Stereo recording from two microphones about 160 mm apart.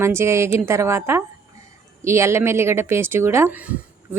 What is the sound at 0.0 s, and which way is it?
A woman's voice, 15° right (ahead or behind).